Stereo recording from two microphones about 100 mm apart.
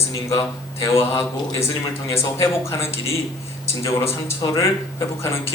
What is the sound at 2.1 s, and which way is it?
A man's voice, 30° left (ahead or behind).